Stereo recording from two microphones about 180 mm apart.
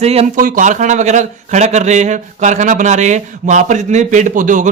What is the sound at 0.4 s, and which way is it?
Speech, 45° right (ahead or behind).